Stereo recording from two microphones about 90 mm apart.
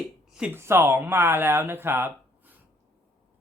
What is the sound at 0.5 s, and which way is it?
Speech, 25° right (ahead or behind).